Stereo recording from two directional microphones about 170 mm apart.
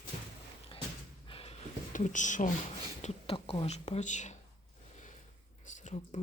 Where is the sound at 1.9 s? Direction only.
45° left (ahead or behind).